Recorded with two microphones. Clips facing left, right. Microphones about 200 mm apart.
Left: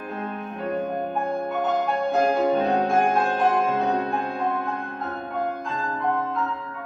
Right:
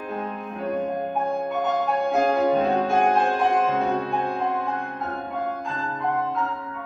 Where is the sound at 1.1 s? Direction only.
Centre (ahead or behind).